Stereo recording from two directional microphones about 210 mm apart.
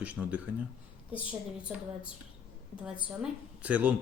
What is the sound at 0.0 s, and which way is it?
Speech, 5° right (ahead or behind).